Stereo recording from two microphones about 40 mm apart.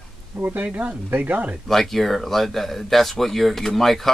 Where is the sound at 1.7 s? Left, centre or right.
Centre.